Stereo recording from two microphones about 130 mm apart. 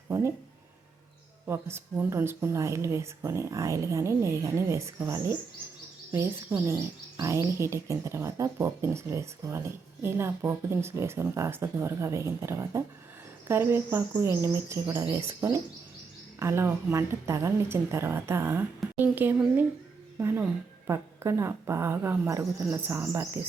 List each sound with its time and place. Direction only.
0.1 s a sound: 20° right (ahead or behind)
1.5 s speech: 20° right (ahead or behind)
6.7 s speech: 20° right (ahead or behind)